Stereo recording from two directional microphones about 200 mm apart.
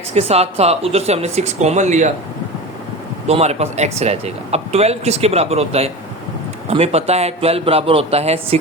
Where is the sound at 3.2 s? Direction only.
30° right (ahead or behind).